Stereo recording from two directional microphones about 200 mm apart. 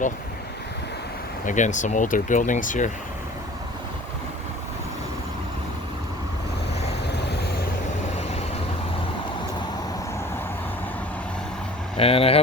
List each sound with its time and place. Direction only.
1.5 s speech: 40° left (ahead or behind)
7.1 s vehicle: 55° left (ahead or behind)
11.9 s speech: 30° left (ahead or behind)